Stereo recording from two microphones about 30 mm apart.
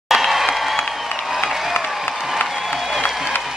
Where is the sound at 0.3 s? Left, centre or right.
Centre.